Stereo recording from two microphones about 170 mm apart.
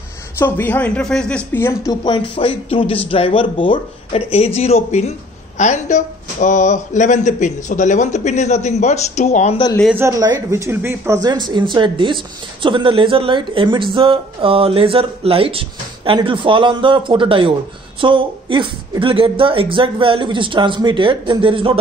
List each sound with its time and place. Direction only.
0.4 s speech: 10° left (ahead or behind); by 9.6 s 45° left (ahead or behind)
9.9 s a woman's voice: 20° right (ahead or behind)